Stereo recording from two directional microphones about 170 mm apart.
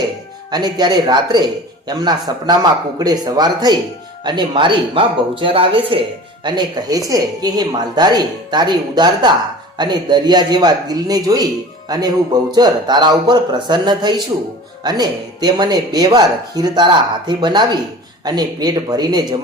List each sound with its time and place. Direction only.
0.5 s speech: 25° right (ahead or behind)